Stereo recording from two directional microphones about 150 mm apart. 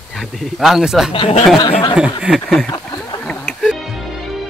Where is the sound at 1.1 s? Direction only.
35° left (ahead or behind).